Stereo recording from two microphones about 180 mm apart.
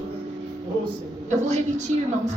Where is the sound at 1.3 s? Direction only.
40° right (ahead or behind).